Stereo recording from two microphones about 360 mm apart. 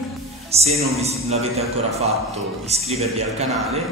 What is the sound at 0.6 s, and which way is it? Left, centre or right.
Speech, centre.